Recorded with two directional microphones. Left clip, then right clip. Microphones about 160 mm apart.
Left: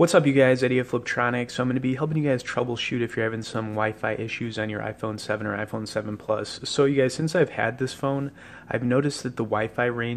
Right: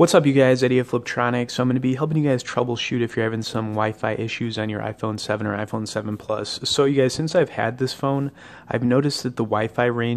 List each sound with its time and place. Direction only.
0.0 s speech: 25° right (ahead or behind)